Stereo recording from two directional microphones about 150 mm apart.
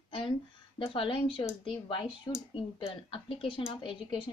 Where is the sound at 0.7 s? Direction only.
35° left (ahead or behind).